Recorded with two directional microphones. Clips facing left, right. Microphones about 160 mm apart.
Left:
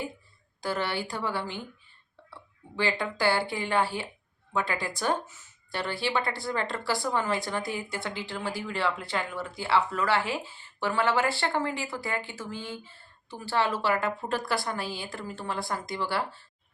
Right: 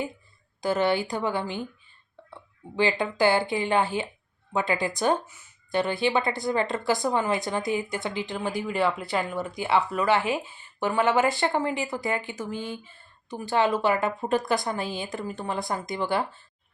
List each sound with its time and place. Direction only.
0.6 s a woman's voice: 20° right (ahead or behind)